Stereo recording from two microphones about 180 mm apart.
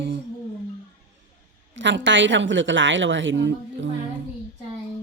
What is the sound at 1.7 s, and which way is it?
A woman's voice, 90° right.